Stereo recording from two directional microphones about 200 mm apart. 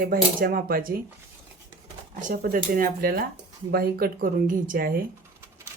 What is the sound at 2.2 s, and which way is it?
Speech, 45° right (ahead or behind).